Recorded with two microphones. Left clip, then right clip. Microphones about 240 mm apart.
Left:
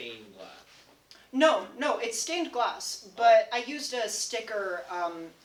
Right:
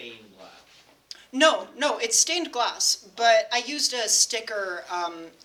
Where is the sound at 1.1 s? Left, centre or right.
Right.